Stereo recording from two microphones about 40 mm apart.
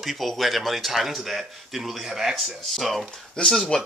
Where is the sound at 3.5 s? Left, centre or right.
Centre.